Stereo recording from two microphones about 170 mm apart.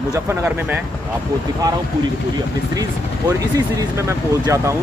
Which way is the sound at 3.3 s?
20° right (ahead or behind).